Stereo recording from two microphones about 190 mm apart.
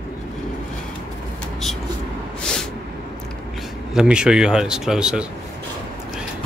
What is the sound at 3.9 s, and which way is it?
Speech, 5° right (ahead or behind).